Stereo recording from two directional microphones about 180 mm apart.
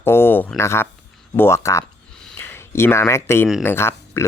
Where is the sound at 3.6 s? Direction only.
15° left (ahead or behind).